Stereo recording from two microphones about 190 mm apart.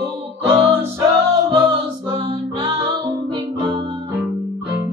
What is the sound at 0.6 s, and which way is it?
Music, 30° right (ahead or behind).